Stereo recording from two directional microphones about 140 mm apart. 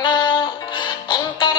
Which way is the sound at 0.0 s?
35° left (ahead or behind).